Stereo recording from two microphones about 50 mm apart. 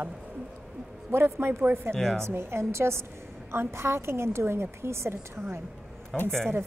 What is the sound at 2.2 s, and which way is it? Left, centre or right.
A woman's voice, right.